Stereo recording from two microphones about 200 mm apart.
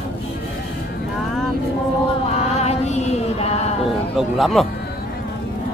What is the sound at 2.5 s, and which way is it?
Music, 30° left (ahead or behind).